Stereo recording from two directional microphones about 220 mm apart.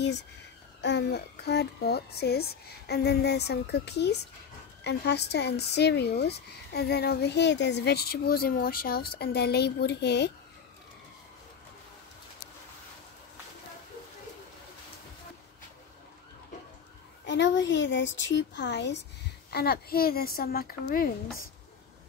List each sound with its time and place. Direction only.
0.7 s speech: 50° left (ahead or behind)
17.3 s speech: 55° left (ahead or behind)